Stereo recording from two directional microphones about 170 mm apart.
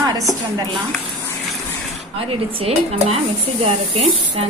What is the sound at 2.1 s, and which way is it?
Speech, 35° right (ahead or behind).